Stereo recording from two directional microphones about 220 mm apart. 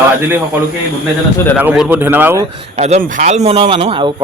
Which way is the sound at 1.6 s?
10° right (ahead or behind).